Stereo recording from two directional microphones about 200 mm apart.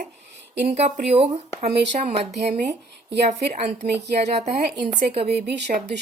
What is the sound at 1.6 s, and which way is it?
Speech, 55° right (ahead or behind).